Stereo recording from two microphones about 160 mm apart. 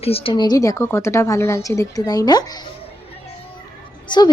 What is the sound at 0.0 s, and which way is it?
A woman's voice, 35° left (ahead or behind).